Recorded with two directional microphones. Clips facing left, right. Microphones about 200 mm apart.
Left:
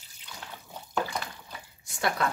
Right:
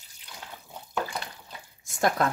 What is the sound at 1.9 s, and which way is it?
Speech, 45° right (ahead or behind).